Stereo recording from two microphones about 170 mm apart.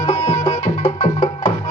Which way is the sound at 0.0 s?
35° left (ahead or behind).